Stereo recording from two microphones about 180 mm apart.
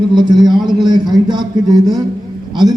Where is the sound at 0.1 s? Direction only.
25° right (ahead or behind).